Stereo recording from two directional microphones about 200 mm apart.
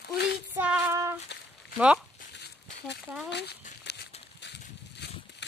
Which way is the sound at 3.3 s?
55° left (ahead or behind).